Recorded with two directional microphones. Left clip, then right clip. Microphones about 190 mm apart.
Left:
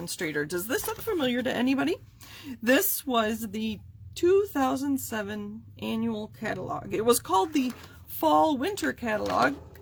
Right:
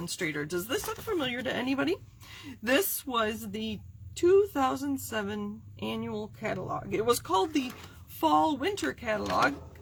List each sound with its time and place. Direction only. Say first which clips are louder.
0.0 s speech: left 3 dB; 40° left (ahead or behind)